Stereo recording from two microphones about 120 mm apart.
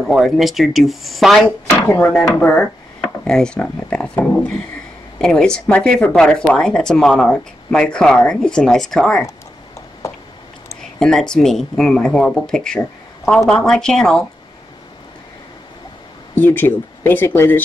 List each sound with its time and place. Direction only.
0.0 s speech: centre (ahead or behind)
2.5 s speech: 5° left (ahead or behind)
10.8 s speech: 5° left (ahead or behind)
16.3 s speech: 15° left (ahead or behind)